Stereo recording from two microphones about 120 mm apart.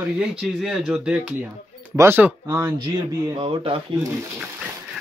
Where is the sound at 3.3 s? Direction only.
50° right (ahead or behind).